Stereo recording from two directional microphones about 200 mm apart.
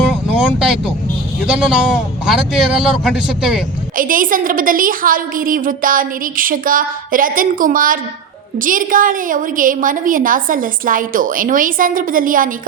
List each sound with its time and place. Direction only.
0.1 s a sound: 5° right (ahead or behind)
1.5 s a man's voice: 5° right (ahead or behind)
3.9 s a woman's voice: 45° right (ahead or behind)